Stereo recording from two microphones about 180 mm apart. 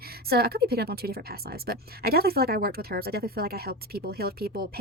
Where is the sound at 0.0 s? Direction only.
60° right (ahead or behind).